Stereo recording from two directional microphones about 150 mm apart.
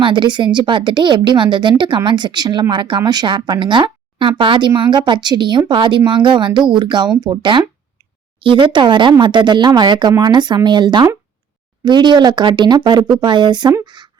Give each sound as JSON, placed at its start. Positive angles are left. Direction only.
{"t": 0.0, "sound": "speech", "side_deg": -30}